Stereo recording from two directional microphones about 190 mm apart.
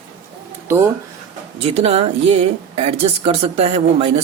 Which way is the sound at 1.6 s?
30° right (ahead or behind).